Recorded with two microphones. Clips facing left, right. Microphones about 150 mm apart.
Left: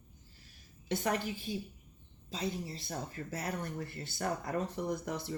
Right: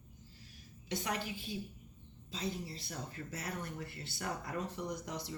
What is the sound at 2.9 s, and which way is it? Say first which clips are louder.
Speech: left 6 dB; 45° left (ahead or behind).